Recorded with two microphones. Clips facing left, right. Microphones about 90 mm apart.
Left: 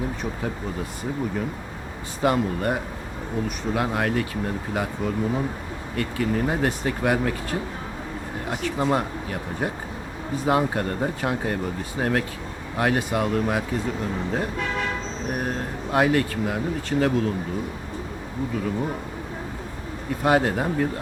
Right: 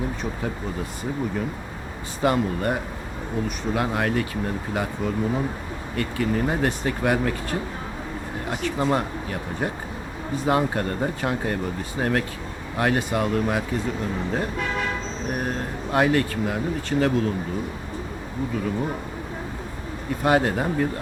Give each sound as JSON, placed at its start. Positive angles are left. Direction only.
{"t": 2.2, "sound": "speech", "side_deg": 0}
{"t": 15.3, "sound": "speech", "side_deg": 5}
{"t": 20.2, "sound": "speech", "side_deg": 0}